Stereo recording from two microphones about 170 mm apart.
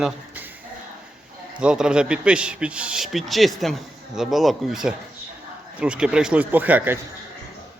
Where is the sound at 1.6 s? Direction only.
5° right (ahead or behind).